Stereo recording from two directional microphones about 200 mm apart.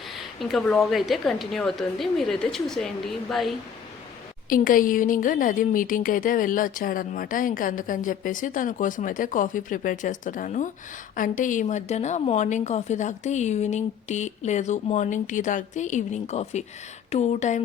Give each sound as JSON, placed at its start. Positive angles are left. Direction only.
{"t": 0.2, "sound": "a woman's voice", "side_deg": 0}
{"t": 4.4, "sound": "a woman's voice", "side_deg": 45}